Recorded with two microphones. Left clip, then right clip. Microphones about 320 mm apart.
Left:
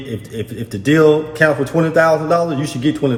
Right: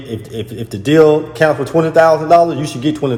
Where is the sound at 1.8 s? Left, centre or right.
Centre.